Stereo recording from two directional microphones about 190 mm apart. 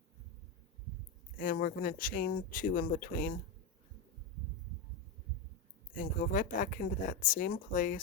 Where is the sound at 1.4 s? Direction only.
50° left (ahead or behind).